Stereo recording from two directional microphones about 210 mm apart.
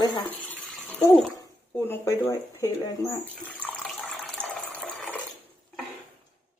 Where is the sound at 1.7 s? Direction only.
10° left (ahead or behind).